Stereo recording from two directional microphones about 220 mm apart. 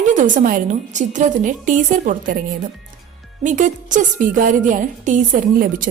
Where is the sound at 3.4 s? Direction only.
35° right (ahead or behind).